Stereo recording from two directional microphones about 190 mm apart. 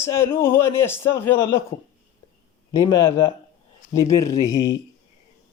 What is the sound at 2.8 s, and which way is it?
Speech, 20° left (ahead or behind).